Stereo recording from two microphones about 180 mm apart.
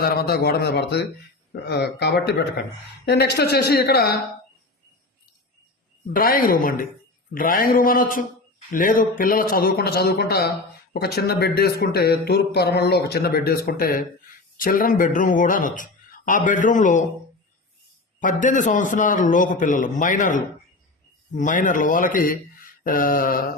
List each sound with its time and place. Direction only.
0.0 s speech: 60° left (ahead or behind)
6.1 s speech: 55° left (ahead or behind)
18.2 s speech: 45° left (ahead or behind)